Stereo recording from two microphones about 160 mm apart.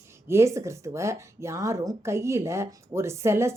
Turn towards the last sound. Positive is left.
turn(degrees=-15)  # may be behind; listen again after turning